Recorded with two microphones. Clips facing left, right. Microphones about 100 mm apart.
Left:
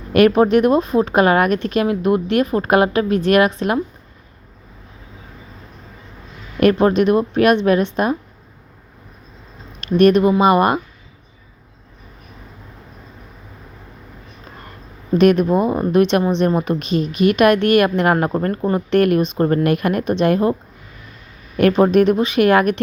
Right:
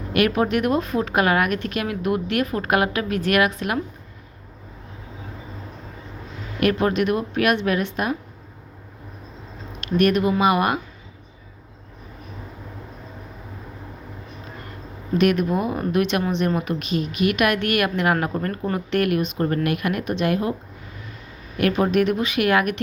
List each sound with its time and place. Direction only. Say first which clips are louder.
0.1 s a woman's voice: left 8 dB; 35° left (ahead or behind)
6.6 s a woman's voice: left 6 dB; 35° left (ahead or behind)
10.0 s a woman's voice: left 6 dB; 30° left (ahead or behind)
15.2 s a woman's voice: left 6 dB; 35° left (ahead or behind)
21.6 s a woman's voice: left 6 dB; 35° left (ahead or behind)